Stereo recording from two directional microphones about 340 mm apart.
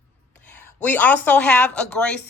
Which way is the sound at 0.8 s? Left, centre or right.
Centre.